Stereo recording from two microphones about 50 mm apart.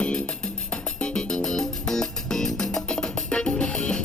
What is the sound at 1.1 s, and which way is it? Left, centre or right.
Music, centre.